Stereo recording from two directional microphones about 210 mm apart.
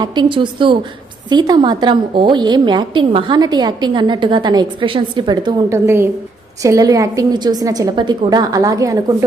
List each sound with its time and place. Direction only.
0.0 s a woman's voice: 20° right (ahead or behind)